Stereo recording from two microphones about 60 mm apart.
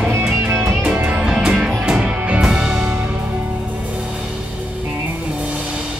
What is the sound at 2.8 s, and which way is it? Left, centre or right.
Music, right.